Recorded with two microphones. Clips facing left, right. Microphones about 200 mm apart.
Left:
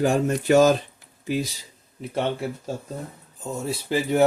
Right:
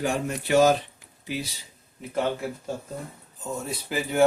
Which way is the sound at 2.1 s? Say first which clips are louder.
Left 1 dB; 30° left (ahead or behind).